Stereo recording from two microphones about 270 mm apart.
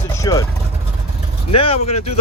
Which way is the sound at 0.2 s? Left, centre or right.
Centre.